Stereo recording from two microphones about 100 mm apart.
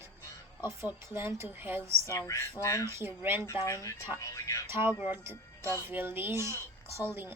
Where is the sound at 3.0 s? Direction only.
20° right (ahead or behind).